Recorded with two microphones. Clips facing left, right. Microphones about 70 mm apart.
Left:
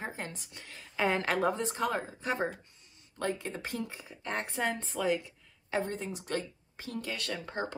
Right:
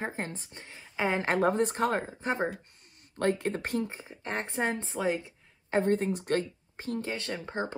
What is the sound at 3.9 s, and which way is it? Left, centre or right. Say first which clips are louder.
A woman's voice: right 1 dB; right.